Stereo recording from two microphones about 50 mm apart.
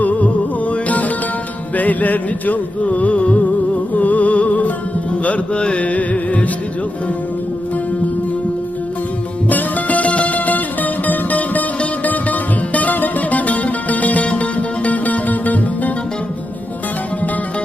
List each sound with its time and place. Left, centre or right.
0.7 s music: left
9.5 s music: left